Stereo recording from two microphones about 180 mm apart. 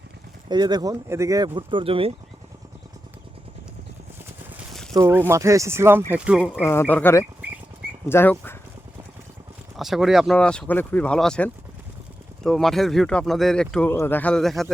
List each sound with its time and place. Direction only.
0.4 s speech: 25° right (ahead or behind)
4.9 s speech: 15° right (ahead or behind)
6.4 s speech: 10° left (ahead or behind)
9.7 s speech: centre (ahead or behind)